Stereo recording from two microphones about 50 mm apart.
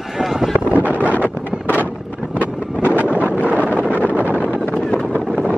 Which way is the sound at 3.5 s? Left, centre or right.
Right.